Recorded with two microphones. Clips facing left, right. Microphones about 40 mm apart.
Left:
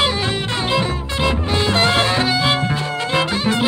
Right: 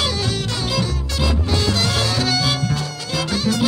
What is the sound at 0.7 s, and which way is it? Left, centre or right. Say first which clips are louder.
Music: left 3 dB; left.